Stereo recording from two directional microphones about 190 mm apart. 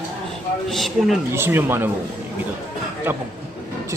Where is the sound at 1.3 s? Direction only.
10° right (ahead or behind).